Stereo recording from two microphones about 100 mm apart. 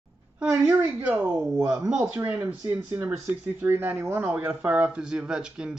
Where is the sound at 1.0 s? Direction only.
20° right (ahead or behind).